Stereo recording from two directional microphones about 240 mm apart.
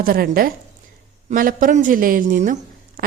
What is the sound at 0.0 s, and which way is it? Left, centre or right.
A woman's voice, right.